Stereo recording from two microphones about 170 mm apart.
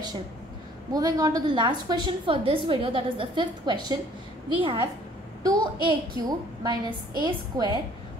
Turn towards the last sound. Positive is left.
turn(degrees=-25)  # may be behind; listen again after turning